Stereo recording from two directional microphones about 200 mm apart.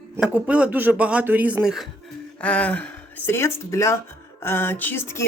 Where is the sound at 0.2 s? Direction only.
5° right (ahead or behind).